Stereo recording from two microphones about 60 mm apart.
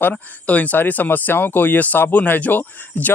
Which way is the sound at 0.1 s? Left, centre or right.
Left.